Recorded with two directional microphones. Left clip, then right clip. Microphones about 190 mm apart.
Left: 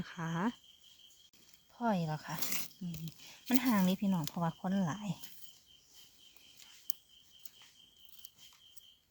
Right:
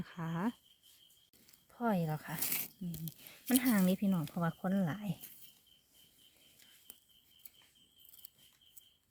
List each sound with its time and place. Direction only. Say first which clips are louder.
0.0 s speech: left 2 dB; 5° right (ahead or behind)
1.7 s speech: left 1 dB; 20° right (ahead or behind)
6.9 s a sound: left 11 dB; 60° left (ahead or behind)